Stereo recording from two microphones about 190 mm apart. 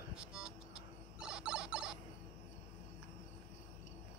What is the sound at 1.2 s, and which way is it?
Fowl, 5° right (ahead or behind).